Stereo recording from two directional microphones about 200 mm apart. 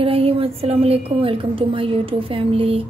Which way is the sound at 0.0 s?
30° right (ahead or behind).